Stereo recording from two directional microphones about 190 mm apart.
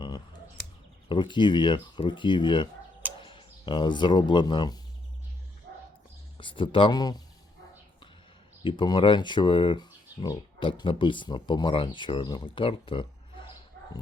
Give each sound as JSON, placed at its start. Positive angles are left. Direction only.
{"t": 1.0, "sound": "speech", "side_deg": 25}
{"t": 6.3, "sound": "speech", "side_deg": 25}
{"t": 8.6, "sound": "speech", "side_deg": 25}